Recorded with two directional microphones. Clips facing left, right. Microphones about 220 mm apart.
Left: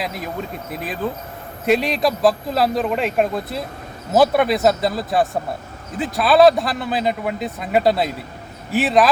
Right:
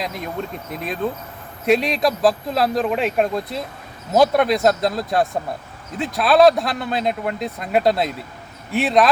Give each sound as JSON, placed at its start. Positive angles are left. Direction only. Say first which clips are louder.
{"t": 0.0, "sound": "speech", "louder": "even", "side_deg": 5}